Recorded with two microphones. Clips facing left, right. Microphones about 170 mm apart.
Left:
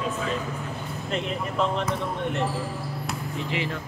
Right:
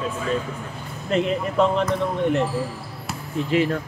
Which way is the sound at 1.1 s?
Centre (ahead or behind).